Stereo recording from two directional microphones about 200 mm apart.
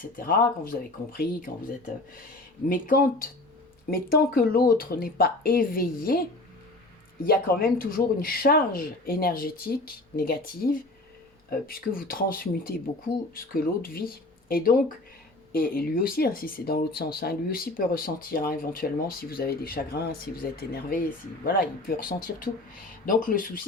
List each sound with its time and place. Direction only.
0.2 s speech: 45° left (ahead or behind)
2.6 s speech: 45° left (ahead or behind)
7.3 s speech: 50° left (ahead or behind)